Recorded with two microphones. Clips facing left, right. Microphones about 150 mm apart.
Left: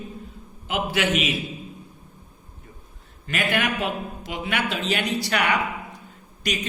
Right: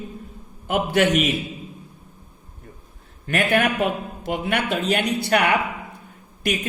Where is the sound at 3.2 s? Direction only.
60° right (ahead or behind).